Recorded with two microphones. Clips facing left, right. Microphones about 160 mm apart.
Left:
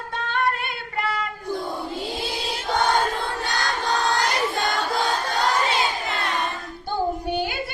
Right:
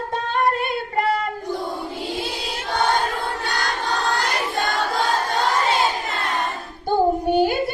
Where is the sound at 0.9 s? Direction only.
45° right (ahead or behind).